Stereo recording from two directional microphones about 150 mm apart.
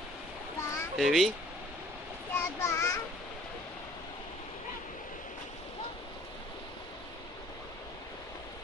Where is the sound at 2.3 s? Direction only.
15° left (ahead or behind).